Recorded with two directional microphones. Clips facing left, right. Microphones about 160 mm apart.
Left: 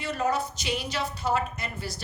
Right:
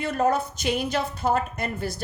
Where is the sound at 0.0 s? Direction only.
50° right (ahead or behind).